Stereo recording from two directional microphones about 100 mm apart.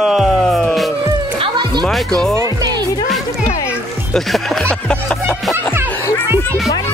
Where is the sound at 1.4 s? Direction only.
50° right (ahead or behind).